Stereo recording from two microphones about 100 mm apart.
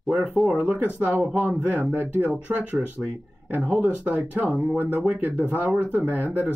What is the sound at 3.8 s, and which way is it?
Speech, 20° right (ahead or behind).